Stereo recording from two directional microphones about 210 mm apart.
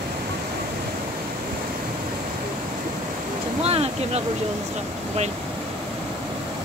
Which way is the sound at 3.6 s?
30° right (ahead or behind).